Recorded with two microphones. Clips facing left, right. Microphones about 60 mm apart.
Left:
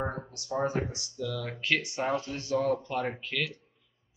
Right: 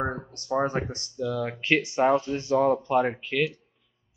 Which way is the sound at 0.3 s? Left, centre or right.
Right.